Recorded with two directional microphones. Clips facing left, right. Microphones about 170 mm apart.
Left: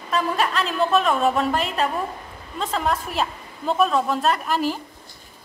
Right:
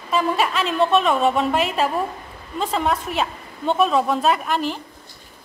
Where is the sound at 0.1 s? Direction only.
Centre (ahead or behind).